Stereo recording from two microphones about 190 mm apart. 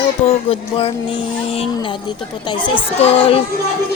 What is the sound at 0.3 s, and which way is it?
Speech, 30° left (ahead or behind).